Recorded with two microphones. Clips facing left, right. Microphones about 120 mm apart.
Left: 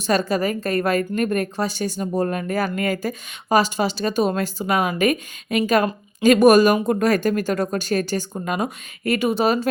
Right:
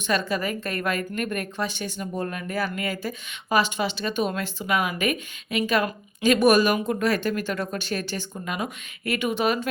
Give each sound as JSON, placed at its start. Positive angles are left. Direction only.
{"t": 0.1, "sound": "a woman's voice", "side_deg": 40}